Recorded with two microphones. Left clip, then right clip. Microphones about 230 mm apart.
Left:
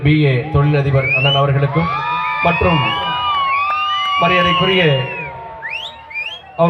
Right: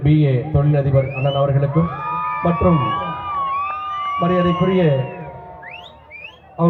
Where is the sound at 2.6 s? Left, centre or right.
Left.